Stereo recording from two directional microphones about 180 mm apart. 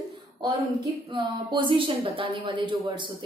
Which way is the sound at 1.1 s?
25° right (ahead or behind).